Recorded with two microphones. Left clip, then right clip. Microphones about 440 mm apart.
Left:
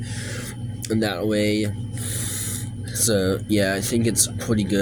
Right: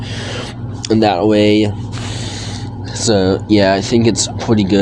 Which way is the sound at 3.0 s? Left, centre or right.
Left.